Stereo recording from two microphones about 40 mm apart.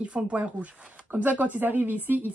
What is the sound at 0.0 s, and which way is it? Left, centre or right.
Speech, right.